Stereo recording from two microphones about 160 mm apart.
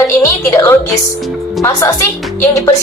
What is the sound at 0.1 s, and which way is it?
Music, 15° left (ahead or behind).